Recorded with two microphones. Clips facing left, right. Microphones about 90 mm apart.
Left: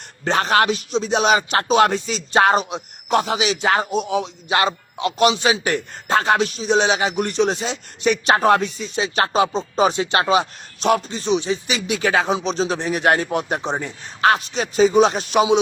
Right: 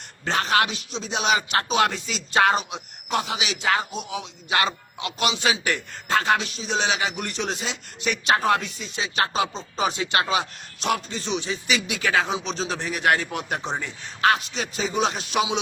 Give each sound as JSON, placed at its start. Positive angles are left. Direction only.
{"t": 0.3, "sound": "speech", "side_deg": 40}
{"t": 4.4, "sound": "speech", "side_deg": 30}
{"t": 8.0, "sound": "speech", "side_deg": 40}
{"t": 11.9, "sound": "speech", "side_deg": 35}
{"t": 13.5, "sound": "speech", "side_deg": 20}
{"t": 13.7, "sound": "speech", "side_deg": 35}